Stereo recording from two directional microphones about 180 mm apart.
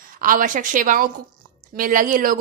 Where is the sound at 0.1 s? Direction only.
50° right (ahead or behind).